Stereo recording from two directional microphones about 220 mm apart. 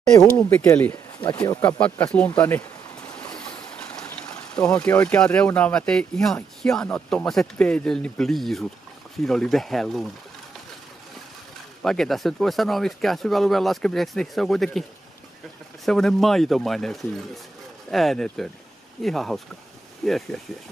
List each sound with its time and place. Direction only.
0.1 s speech: 15° left (ahead or behind)
4.6 s speech: 10° left (ahead or behind)
11.8 s speech: centre (ahead or behind)